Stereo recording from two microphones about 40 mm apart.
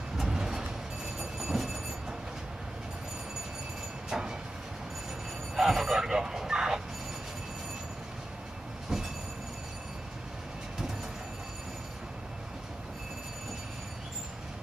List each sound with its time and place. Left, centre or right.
0.2 s vehicle: centre
1.2 s train: centre
4.1 s vehicle: centre
5.6 s telephone: centre